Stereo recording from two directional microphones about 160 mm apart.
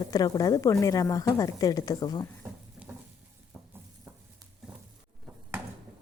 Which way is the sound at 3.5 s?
10° right (ahead or behind).